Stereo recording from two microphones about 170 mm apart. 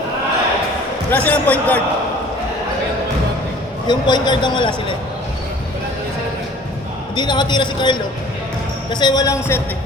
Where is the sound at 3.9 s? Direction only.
25° left (ahead or behind).